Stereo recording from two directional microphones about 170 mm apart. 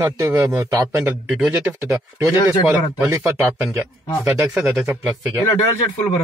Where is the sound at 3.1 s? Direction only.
15° right (ahead or behind).